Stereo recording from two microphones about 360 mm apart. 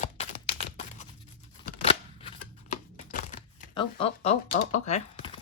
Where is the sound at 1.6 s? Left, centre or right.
Centre.